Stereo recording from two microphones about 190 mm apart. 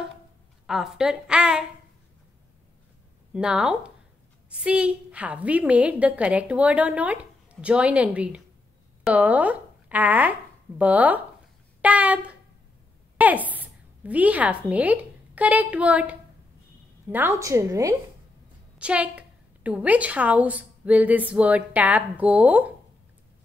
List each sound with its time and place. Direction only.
0.7 s a woman's voice: 5° right (ahead or behind)
3.3 s a woman's voice: 5° right (ahead or behind)
13.5 s a woman's voice: 10° right (ahead or behind)